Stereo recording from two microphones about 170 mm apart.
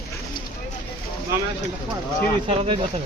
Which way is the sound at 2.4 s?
35° right (ahead or behind).